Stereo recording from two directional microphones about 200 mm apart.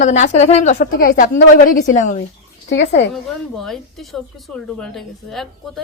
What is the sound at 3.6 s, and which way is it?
A woman's voice, centre (ahead or behind).